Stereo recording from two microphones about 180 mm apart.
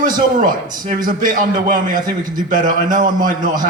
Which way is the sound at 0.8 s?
50° right (ahead or behind).